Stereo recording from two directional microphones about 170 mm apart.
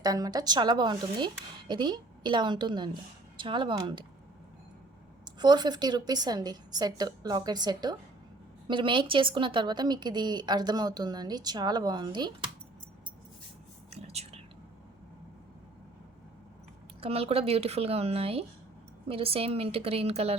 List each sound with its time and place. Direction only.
0.0 s speech: 20° right (ahead or behind)
5.2 s speech: 25° right (ahead or behind)
13.9 s whispering: 40° right (ahead or behind)
17.0 s speech: 35° right (ahead or behind)